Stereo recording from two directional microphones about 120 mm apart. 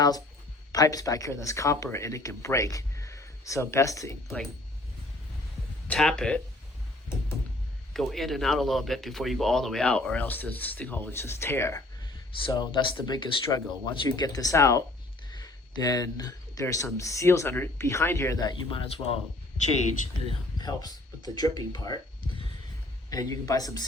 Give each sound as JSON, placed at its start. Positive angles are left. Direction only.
{"t": 0.7, "sound": "speech", "side_deg": 30}
{"t": 5.9, "sound": "speech", "side_deg": 5}
{"t": 7.9, "sound": "speech", "side_deg": 0}
{"t": 12.5, "sound": "speech", "side_deg": 40}
{"t": 14.3, "sound": "speech", "side_deg": 30}
{"t": 18.3, "sound": "speech", "side_deg": 35}
{"t": 18.8, "sound": "speech", "side_deg": 55}
{"t": 20.6, "sound": "speech", "side_deg": 35}